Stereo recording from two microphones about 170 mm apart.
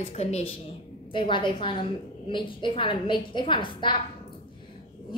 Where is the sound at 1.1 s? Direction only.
30° left (ahead or behind).